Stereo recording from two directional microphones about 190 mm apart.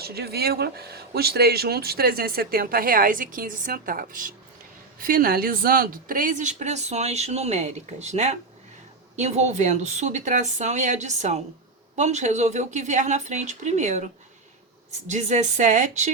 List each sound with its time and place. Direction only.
0.0 s a woman's voice: 55° right (ahead or behind)